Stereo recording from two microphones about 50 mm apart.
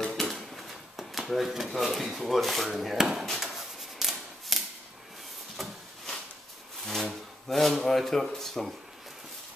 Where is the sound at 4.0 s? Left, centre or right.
Centre.